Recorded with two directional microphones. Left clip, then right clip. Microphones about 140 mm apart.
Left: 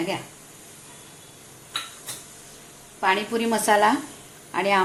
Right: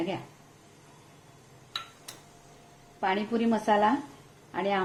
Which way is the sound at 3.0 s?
45° right (ahead or behind).